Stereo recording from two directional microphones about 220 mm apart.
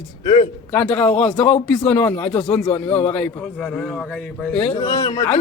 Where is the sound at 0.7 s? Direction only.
5° left (ahead or behind).